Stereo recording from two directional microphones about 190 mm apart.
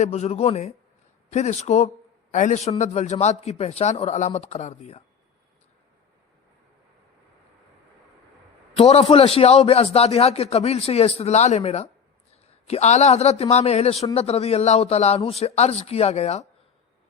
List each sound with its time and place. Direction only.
0.0 s a man's voice: 35° left (ahead or behind)
8.7 s a man's voice: 30° left (ahead or behind)